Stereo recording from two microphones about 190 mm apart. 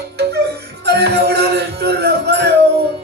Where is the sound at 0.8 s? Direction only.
60° right (ahead or behind).